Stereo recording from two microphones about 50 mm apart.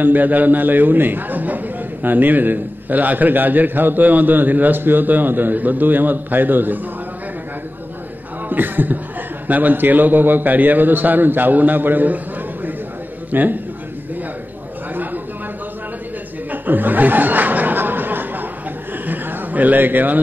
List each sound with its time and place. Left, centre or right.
0.0 s a man's voice: right
8.5 s a man's voice: right
13.3 s a man's voice: right
16.6 s chuckle: right
19.0 s a sound: right